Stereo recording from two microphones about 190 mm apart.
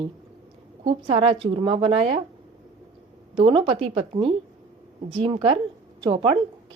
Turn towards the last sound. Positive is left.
turn(degrees=-25)  # may be behind; listen again after turning